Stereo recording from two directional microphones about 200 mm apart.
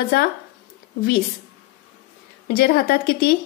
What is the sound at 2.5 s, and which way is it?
Speech, 50° left (ahead or behind).